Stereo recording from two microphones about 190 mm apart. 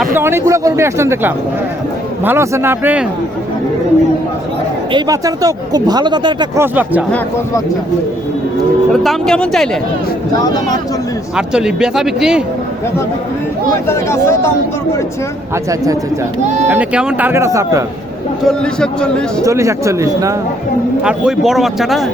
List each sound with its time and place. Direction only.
0.1 s speech: 15° right (ahead or behind)
4.9 s speech: 20° right (ahead or behind)
6.6 s speech: 10° right (ahead or behind)
8.9 s a man's voice: centre (ahead or behind)
10.4 s speech: 20° left (ahead or behind)
11.3 s a man's voice: 5° right (ahead or behind)
13.8 s speech: 15° left (ahead or behind)
15.7 s speech: 20° right (ahead or behind)
16.6 s speech: 5° right (ahead or behind)
18.4 s a man's voice: 5° left (ahead or behind)
19.4 s speech: 15° right (ahead or behind)
21.0 s a man's voice: 5° right (ahead or behind)